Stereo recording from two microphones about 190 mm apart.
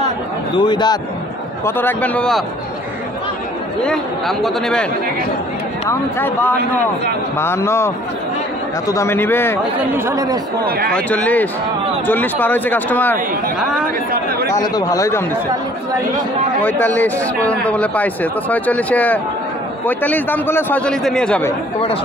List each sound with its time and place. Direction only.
0.6 s a man's voice: 25° left (ahead or behind)
1.6 s speech: 10° left (ahead or behind)
3.8 s a man's voice: centre (ahead or behind)
5.9 s speech: 10° left (ahead or behind)
9.8 s speech: 10° right (ahead or behind)
10.6 s speech: 50° right (ahead or behind)
11.0 s speech: 5° left (ahead or behind)
14.5 s speech: 20° left (ahead or behind)
16.6 s speech: 10° left (ahead or behind)